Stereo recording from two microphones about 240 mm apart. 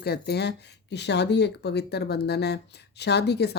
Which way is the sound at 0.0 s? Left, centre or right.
Left.